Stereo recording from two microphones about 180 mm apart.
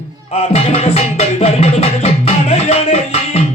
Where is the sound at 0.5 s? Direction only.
35° left (ahead or behind).